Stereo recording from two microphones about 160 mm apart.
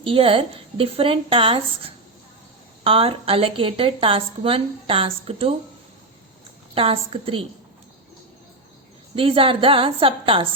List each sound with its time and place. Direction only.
0.0 s a woman's voice: 35° right (ahead or behind)
2.8 s a woman's voice: 35° right (ahead or behind)
6.7 s a woman's voice: 35° right (ahead or behind)
9.1 s a woman's voice: 35° right (ahead or behind)